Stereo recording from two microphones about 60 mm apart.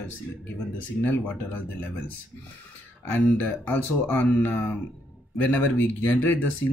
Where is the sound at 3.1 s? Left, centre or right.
Left.